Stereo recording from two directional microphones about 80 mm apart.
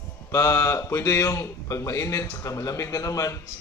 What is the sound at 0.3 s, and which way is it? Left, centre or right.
A man's voice, left.